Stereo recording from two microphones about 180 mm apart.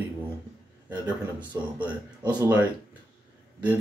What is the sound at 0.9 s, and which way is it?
Speech, 25° right (ahead or behind).